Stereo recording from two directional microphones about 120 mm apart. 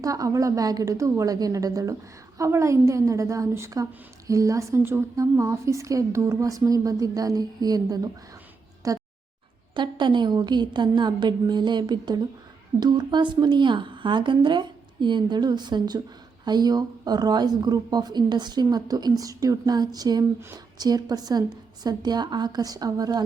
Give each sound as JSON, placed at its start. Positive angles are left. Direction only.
{"t": 0.0, "sound": "a woman's voice", "side_deg": -30}
{"t": 9.7, "sound": "speech", "side_deg": -40}